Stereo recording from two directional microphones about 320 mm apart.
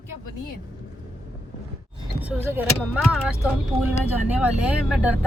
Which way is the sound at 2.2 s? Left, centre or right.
Centre.